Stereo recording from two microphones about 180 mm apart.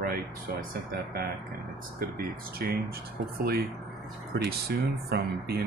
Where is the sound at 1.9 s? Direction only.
55° right (ahead or behind).